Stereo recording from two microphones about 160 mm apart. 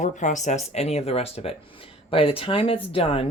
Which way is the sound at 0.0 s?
50° left (ahead or behind).